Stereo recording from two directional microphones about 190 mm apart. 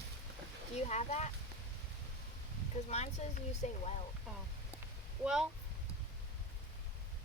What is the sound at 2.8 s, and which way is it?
Speech, 35° left (ahead or behind).